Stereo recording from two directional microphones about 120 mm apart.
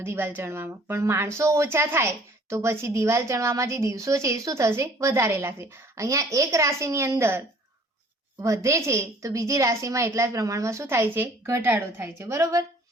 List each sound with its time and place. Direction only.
0.0 s speech: 20° right (ahead or behind)